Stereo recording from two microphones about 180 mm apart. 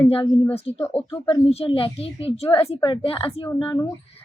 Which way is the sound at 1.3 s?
30° left (ahead or behind).